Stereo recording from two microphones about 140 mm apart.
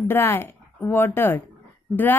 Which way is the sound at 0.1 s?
15° left (ahead or behind).